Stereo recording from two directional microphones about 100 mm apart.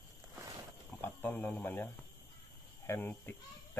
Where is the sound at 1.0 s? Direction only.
20° left (ahead or behind).